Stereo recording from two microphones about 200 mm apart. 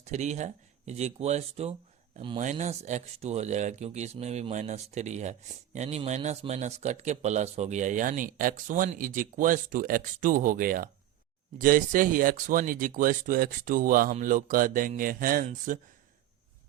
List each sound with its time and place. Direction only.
0.0 s speech: 35° right (ahead or behind)